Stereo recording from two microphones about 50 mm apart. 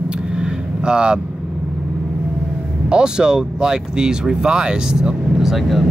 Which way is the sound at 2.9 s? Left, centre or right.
Centre.